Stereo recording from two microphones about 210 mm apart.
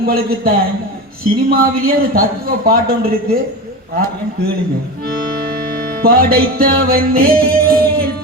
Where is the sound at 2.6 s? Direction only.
45° right (ahead or behind).